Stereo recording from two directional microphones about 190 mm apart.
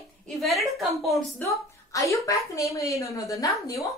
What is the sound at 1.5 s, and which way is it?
A woman's voice, 15° left (ahead or behind).